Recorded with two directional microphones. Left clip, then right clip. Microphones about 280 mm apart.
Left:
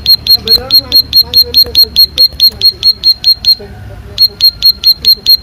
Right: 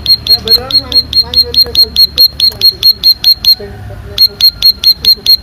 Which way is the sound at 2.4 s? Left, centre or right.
Centre.